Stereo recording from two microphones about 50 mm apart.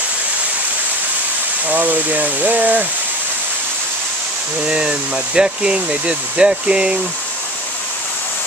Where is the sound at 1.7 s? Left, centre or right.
Right.